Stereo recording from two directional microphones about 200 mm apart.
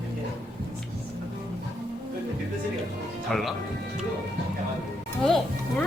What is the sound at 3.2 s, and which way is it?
Speech, centre (ahead or behind).